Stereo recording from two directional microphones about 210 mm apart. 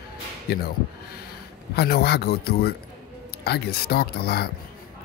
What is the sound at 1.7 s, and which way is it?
Speech, 50° left (ahead or behind).